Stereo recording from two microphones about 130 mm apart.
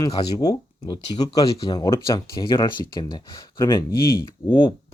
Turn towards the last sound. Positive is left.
turn(degrees=40)  # may be behind; listen again after turning